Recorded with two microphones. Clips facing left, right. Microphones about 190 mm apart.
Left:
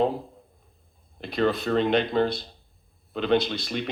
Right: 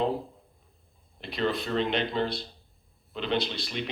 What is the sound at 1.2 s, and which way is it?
Speech, 50° left (ahead or behind).